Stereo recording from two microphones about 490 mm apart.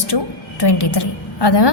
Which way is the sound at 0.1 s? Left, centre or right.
Left.